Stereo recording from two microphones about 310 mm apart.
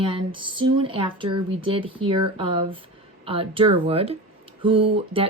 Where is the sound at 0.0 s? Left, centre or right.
Centre.